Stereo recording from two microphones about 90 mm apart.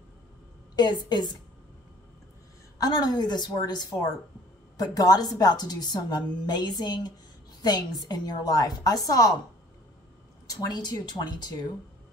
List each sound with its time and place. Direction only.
0.7 s a woman's voice: 55° left (ahead or behind)
2.8 s a woman's voice: 45° left (ahead or behind)
10.4 s a woman's voice: 45° left (ahead or behind)